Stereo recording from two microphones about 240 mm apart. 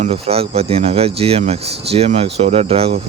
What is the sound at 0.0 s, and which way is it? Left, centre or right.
Speech, right.